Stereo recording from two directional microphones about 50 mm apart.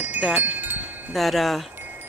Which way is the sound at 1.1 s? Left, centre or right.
Centre.